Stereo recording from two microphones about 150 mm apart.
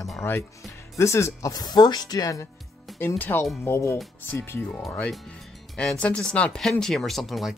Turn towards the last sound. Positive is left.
turn(degrees=0)  # may be behind; listen again after turning